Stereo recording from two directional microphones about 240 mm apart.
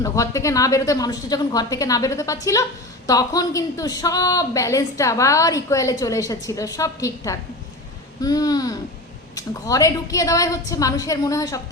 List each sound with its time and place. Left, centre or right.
0.0 s a woman's voice: centre
8.2 s a sound: centre
9.3 s a woman's voice: centre